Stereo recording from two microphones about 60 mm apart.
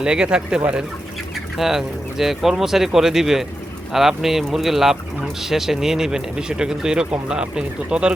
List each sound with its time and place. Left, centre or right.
0.0 s speech: centre
1.5 s speech: centre